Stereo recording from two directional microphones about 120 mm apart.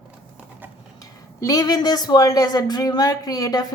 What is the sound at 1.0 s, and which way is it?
A woman's voice, 30° left (ahead or behind).